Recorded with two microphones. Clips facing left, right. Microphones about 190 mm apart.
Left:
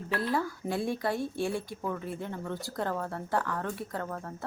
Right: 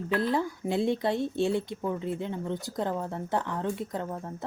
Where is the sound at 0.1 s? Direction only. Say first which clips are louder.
Right 3 dB; 20° right (ahead or behind).